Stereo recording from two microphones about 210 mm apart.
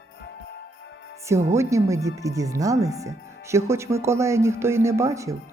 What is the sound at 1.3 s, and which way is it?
Speech, 15° right (ahead or behind).